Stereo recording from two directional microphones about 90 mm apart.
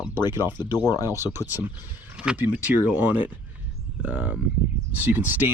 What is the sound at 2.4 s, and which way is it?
Speech, 20° right (ahead or behind).